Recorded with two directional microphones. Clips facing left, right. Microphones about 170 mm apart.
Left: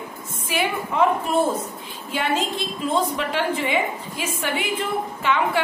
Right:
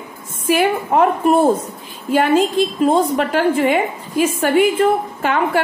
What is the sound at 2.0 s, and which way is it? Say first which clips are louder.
A woman's voice: right 10 dB; 50° right (ahead or behind).